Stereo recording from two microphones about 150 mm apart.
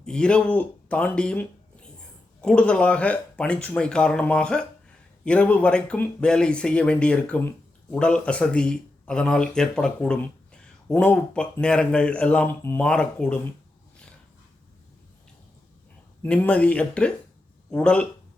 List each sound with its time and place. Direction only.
0.0 s speech: 5° left (ahead or behind)
16.2 s speech: 10° left (ahead or behind)